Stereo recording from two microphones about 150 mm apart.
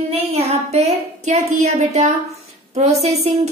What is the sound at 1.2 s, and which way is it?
A woman's voice, 50° right (ahead or behind).